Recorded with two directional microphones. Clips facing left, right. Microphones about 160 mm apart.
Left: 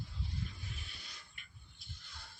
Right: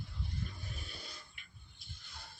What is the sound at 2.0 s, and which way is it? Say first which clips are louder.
Music: right 5 dB; 15° right (ahead or behind).